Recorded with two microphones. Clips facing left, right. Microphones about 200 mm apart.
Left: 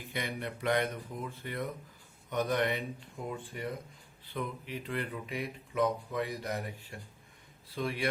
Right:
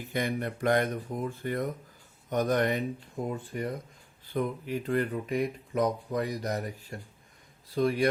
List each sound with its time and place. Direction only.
0.1 s a man's voice: 45° right (ahead or behind)